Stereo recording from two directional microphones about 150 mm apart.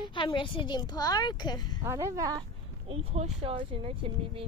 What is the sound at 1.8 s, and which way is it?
Speech, 20° right (ahead or behind).